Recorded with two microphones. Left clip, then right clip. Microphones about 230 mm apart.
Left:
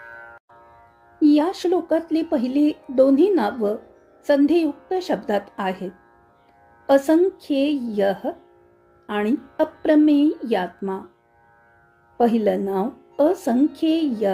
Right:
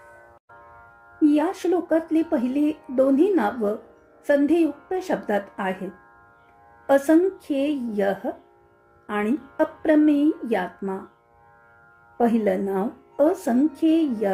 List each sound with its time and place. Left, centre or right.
1.2 s speech: left
12.1 s speech: left